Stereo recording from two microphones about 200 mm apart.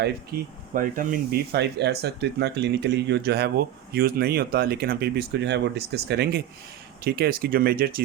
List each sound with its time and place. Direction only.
0.0 s speech: 45° right (ahead or behind)